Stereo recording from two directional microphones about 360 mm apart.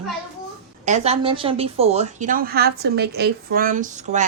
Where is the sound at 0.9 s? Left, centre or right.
Centre.